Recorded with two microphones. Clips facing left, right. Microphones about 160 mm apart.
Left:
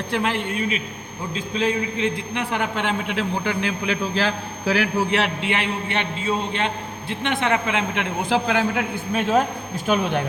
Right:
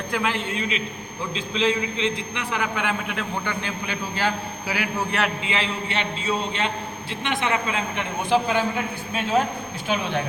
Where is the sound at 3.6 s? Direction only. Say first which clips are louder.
Left 6 dB; 90° left.